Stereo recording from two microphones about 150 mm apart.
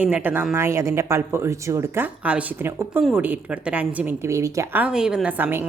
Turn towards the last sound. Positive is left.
turn(degrees=-15)  # may be behind; listen again after turning